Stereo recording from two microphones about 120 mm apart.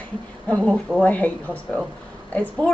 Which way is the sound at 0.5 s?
5° left (ahead or behind).